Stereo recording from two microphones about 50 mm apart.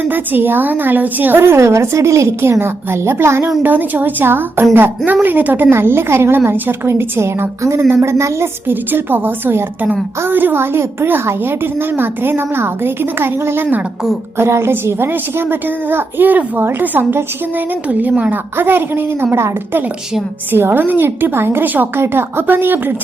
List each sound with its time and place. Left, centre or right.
0.1 s a woman's voice: right
1.4 s a woman's voice: right
2.4 s a woman's voice: right
3.6 s a woman's voice: right
5.7 s a woman's voice: right
8.6 s a woman's voice: right
14.3 s a woman's voice: right
18.5 s a woman's voice: right